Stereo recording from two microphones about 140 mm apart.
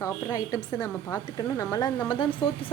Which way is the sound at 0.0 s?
25° left (ahead or behind).